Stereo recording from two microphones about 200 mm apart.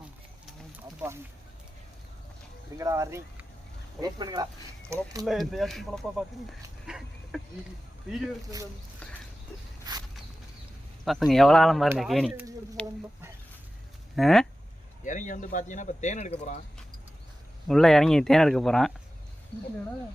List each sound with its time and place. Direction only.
2.7 s speech: 15° right (ahead or behind)
5.2 s speech: centre (ahead or behind)
6.8 s a sound: centre (ahead or behind)
9.9 s a sound: 20° right (ahead or behind)
11.0 s speech: centre (ahead or behind)
12.8 s chicken: 5° left (ahead or behind)
14.2 s speech: centre (ahead or behind)
15.0 s speech: 40° left (ahead or behind)
17.7 s speech: centre (ahead or behind)